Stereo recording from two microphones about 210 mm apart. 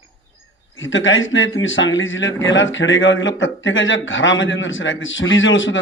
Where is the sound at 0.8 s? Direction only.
65° left (ahead or behind).